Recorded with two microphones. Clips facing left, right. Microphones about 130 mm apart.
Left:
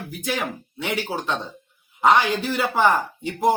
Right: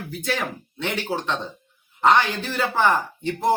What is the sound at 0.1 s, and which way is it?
Speech, 15° left (ahead or behind).